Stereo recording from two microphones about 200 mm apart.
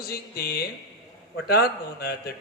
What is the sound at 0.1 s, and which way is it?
A man's voice, 50° left (ahead or behind).